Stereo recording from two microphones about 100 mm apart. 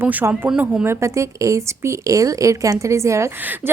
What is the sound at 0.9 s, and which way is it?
A woman's voice, 30° right (ahead or behind).